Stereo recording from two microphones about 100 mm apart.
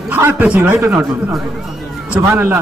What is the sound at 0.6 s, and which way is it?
Speech, 25° right (ahead or behind).